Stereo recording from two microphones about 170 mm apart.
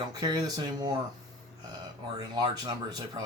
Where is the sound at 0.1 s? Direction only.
25° right (ahead or behind).